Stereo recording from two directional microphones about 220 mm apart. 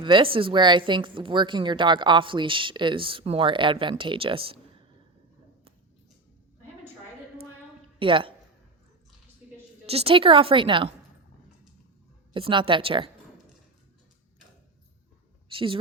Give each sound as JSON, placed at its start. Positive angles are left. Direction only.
{"t": 0.0, "sound": "speech", "side_deg": -20}
{"t": 7.9, "sound": "a woman's voice", "side_deg": -25}
{"t": 9.8, "sound": "speech", "side_deg": -25}
{"t": 12.3, "sound": "speech", "side_deg": -25}
{"t": 15.4, "sound": "speech", "side_deg": -25}